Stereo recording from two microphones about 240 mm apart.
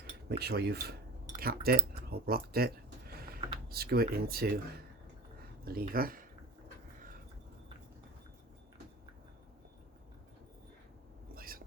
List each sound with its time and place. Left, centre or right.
0.3 s cutlery: right
1.4 s speech: right
5.6 s speech: right
11.3 s a sound: right